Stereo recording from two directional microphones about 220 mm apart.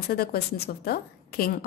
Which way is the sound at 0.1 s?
45° left (ahead or behind).